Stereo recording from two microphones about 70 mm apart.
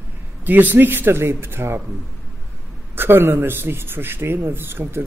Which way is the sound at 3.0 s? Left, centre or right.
Right.